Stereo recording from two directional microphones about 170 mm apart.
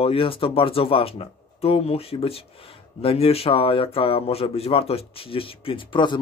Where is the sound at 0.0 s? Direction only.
35° left (ahead or behind).